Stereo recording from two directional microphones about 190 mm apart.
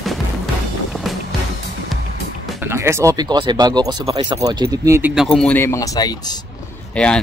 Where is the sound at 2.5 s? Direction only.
15° right (ahead or behind).